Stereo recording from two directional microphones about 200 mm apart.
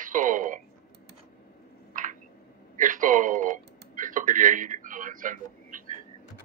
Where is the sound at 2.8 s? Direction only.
40° right (ahead or behind).